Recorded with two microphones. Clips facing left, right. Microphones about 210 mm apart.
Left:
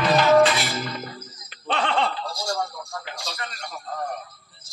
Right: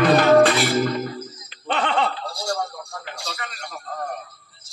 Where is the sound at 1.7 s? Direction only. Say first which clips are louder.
Right 1 dB; 5° right (ahead or behind).